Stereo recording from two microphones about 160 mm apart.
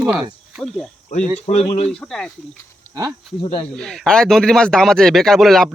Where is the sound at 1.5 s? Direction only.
45° left (ahead or behind).